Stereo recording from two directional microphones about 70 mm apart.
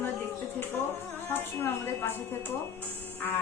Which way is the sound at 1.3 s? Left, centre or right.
Left.